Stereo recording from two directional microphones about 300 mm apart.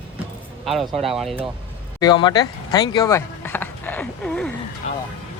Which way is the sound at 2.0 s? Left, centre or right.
Centre.